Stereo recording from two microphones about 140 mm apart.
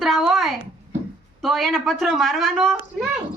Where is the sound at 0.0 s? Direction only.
Centre (ahead or behind).